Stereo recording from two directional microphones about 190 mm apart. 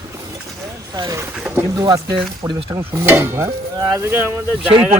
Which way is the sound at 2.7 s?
15° right (ahead or behind).